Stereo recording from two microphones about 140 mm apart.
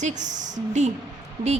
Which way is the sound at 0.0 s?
60° right (ahead or behind).